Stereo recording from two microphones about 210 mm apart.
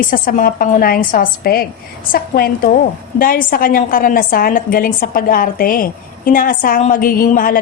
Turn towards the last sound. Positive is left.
turn(degrees=40)  # may be behind; listen again after turning